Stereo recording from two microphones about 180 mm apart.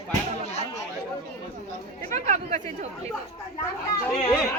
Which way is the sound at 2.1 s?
45° right (ahead or behind).